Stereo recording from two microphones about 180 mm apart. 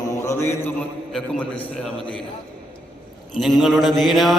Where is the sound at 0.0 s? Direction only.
15° left (ahead or behind).